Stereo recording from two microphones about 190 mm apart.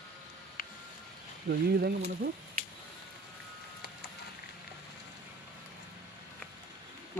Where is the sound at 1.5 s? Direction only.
60° right (ahead or behind).